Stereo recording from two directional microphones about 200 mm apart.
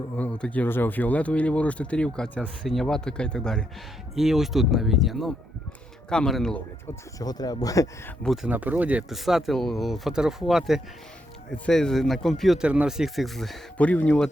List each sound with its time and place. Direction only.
0.2 s speech: 5° left (ahead or behind)
7.2 s speech: 20° left (ahead or behind)
8.2 s speech: centre (ahead or behind)